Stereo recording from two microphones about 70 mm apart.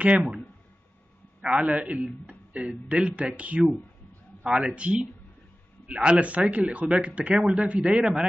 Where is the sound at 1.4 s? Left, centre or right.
Centre.